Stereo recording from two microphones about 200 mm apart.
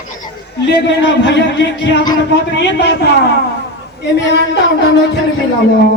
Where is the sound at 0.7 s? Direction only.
60° left (ahead or behind).